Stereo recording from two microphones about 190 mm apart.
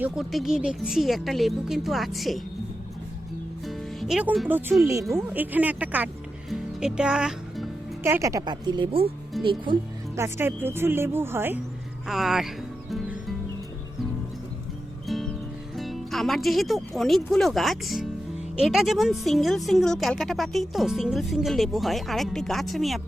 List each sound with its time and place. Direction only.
0.0 s a woman's voice: centre (ahead or behind)
3.7 s music: centre (ahead or behind)
4.4 s speech: 10° right (ahead or behind)
6.5 s music: 5° right (ahead or behind)
8.0 s a woman's voice: 15° right (ahead or behind)
10.2 s a woman's voice: 15° right (ahead or behind)
15.0 s music: centre (ahead or behind)
15.7 s a woman's voice: centre (ahead or behind)